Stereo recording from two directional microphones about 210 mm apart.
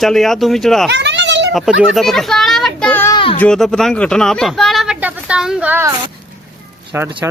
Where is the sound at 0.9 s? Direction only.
55° right (ahead or behind).